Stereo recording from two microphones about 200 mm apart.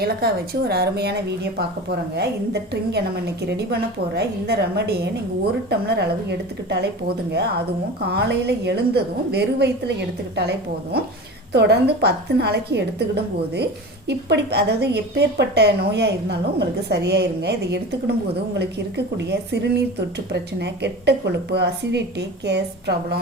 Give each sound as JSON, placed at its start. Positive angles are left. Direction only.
{"t": 0.0, "sound": "a woman's voice", "side_deg": -50}
{"t": 11.5, "sound": "a woman's voice", "side_deg": -55}